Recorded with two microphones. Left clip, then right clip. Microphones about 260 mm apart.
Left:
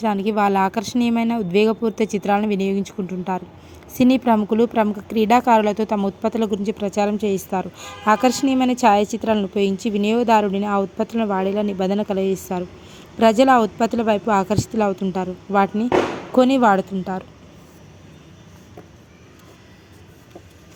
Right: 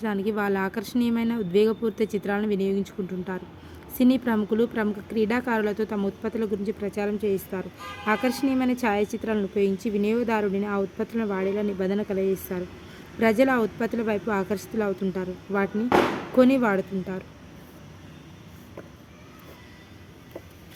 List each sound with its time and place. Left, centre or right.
0.0 s a woman's voice: centre